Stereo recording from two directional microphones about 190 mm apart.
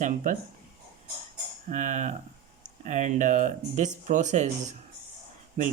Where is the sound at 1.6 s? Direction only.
40° right (ahead or behind).